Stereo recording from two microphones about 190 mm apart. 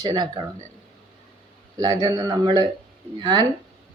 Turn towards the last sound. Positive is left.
turn(degrees=-25)  # may be behind; listen again after turning